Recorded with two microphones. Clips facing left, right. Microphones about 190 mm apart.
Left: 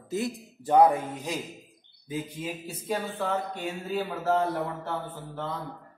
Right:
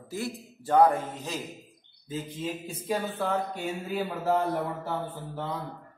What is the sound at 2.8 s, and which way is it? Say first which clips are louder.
Speech: right 1 dB; 5° right (ahead or behind).